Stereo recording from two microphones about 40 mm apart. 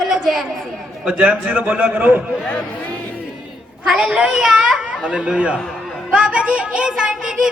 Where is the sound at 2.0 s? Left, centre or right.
Right.